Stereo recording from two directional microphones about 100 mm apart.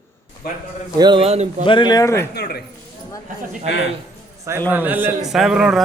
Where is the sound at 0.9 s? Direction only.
45° right (ahead or behind).